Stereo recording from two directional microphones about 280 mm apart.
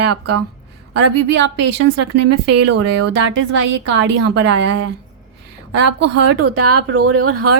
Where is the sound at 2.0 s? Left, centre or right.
Right.